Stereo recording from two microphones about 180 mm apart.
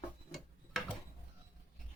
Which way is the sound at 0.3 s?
Centre (ahead or behind).